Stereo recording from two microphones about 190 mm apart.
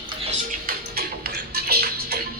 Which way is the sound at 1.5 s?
55° right (ahead or behind).